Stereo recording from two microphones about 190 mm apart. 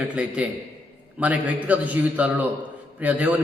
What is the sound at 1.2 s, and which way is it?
A man's voice, 10° right (ahead or behind).